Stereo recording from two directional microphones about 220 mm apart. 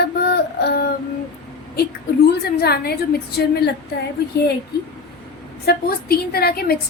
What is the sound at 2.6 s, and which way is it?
Speech, 45° left (ahead or behind).